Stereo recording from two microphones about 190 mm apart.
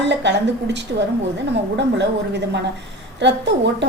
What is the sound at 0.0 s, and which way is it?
Speech, 65° right (ahead or behind).